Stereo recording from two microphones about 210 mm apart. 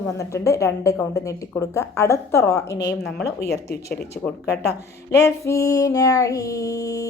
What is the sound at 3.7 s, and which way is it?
Speech, 50° left (ahead or behind).